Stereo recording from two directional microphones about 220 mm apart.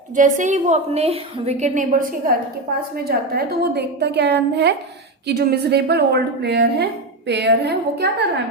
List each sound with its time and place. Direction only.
0.2 s a woman's voice: 35° right (ahead or behind)